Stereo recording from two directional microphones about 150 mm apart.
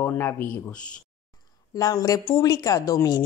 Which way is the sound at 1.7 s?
25° left (ahead or behind).